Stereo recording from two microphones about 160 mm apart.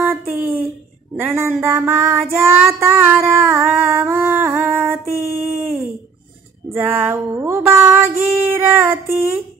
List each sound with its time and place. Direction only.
0.0 s a sound: 15° right (ahead or behind)
1.1 s music: 15° right (ahead or behind)
2.4 s female singing: 15° right (ahead or behind)
6.7 s music: 15° right (ahead or behind)